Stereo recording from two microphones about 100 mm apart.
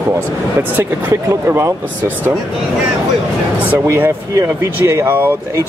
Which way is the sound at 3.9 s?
30° right (ahead or behind).